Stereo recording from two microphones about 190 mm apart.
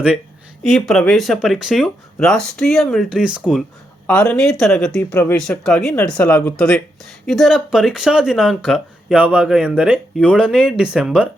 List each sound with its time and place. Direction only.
0.6 s speech: centre (ahead or behind)
4.0 s speech: 5° left (ahead or behind)